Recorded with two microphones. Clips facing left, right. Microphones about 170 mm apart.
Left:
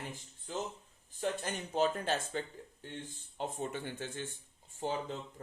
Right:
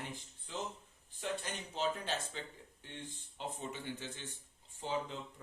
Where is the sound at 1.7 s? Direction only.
50° left (ahead or behind).